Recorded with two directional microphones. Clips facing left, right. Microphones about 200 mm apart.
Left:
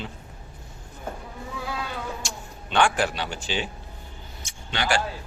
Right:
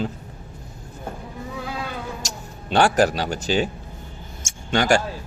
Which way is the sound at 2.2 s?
40° right (ahead or behind).